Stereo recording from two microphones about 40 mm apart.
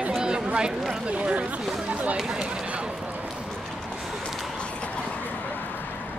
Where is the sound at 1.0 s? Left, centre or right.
Right.